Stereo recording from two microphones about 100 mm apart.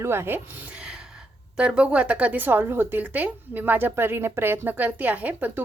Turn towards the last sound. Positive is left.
turn(degrees=-15)  # may be behind; listen again after turning